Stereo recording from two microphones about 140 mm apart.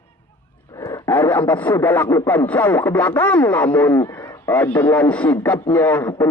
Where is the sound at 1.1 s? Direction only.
15° left (ahead or behind).